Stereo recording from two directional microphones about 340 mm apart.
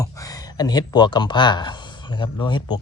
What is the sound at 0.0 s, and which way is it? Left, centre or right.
Speech, centre.